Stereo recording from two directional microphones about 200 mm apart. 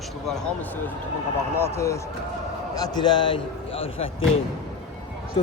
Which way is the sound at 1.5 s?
10° left (ahead or behind).